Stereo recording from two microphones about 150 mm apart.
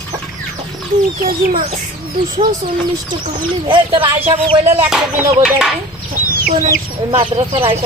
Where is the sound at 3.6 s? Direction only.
35° right (ahead or behind).